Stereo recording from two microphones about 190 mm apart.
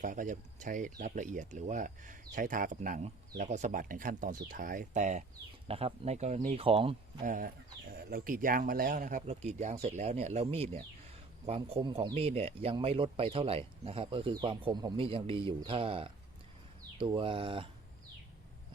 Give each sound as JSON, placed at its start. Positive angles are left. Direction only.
{"t": 0.0, "sound": "speech", "side_deg": -45}